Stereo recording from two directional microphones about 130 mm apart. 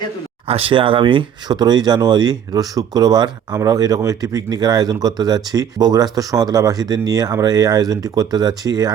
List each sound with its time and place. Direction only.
0.4 s speech: 45° right (ahead or behind); by 8.9 s 30° right (ahead or behind)